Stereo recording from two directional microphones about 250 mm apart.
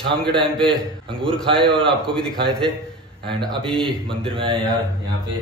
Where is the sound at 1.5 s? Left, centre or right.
Centre.